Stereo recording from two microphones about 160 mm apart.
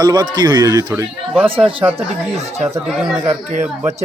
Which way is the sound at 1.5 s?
35° right (ahead or behind).